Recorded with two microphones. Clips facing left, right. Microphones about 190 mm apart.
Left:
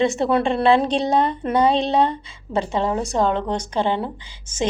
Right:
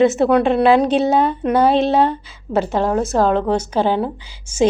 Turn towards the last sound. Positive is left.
turn(degrees=-10)  # may be behind; listen again after turning